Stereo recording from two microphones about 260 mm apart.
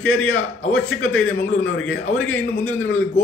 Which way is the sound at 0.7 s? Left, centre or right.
Left.